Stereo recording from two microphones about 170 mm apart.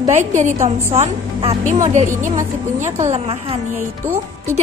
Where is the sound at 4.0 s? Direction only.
15° right (ahead or behind).